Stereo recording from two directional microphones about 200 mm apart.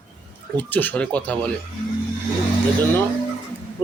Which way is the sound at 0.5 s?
10° left (ahead or behind).